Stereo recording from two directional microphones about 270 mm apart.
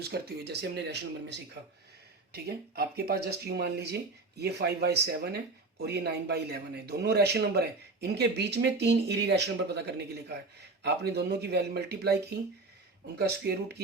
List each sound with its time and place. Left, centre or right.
0.1 s speech: right
13.1 s speech: right